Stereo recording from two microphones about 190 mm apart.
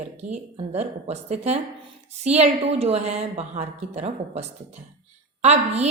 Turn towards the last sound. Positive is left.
turn(degrees=-35)  # may be behind; listen again after turning